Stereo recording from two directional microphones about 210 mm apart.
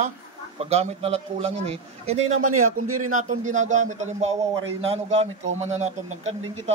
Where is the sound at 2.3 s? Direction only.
90° right.